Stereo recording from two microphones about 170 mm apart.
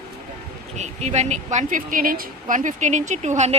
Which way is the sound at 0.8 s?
40° right (ahead or behind).